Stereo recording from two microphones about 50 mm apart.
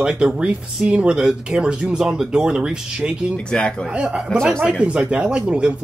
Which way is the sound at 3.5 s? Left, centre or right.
Centre.